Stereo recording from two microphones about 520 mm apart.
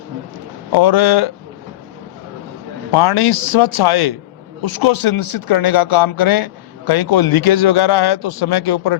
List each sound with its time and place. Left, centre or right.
0.7 s speech: left
2.9 s a man's voice: left